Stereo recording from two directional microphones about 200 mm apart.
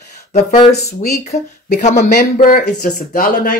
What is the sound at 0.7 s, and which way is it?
Speech, 50° left (ahead or behind).